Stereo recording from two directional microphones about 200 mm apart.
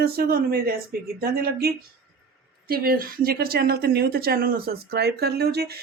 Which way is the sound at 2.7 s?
45° right (ahead or behind).